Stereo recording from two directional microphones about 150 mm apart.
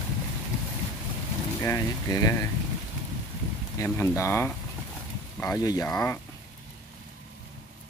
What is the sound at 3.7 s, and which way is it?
Speech, 15° left (ahead or behind).